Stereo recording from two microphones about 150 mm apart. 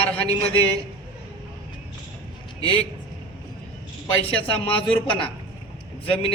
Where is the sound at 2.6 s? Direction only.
40° left (ahead or behind).